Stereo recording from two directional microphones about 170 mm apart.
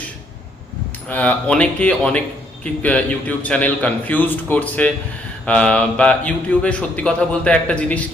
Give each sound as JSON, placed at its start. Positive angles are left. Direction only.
{"t": 1.0, "sound": "speech", "side_deg": 10}